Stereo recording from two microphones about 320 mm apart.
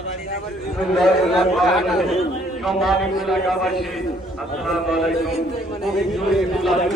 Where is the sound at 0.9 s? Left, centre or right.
Centre.